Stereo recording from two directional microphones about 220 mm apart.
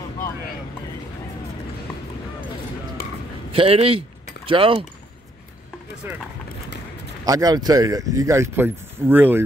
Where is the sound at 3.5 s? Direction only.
25° right (ahead or behind).